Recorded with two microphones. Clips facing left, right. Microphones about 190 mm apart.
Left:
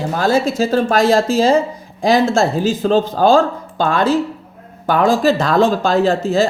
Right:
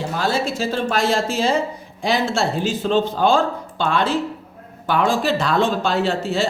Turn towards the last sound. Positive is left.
turn(degrees=40)  # may be behind; listen again after turning